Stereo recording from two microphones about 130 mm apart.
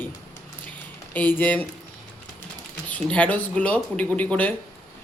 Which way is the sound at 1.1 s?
15° left (ahead or behind).